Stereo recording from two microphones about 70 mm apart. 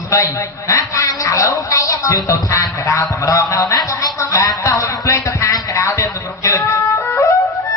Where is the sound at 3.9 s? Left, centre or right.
Left.